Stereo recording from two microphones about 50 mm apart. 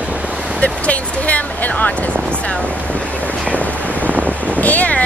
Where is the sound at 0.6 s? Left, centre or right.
Left.